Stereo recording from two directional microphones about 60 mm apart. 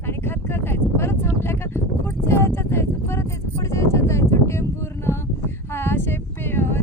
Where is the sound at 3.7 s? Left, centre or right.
Left.